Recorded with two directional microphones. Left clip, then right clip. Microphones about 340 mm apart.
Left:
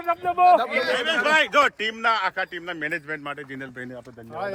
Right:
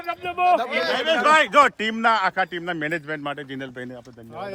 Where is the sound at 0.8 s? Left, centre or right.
Centre.